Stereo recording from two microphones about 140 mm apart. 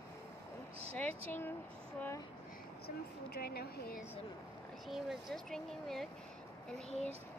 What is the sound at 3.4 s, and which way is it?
Speech, 90° left.